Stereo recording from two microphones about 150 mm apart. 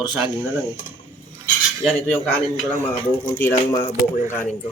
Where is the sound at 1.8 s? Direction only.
5° left (ahead or behind).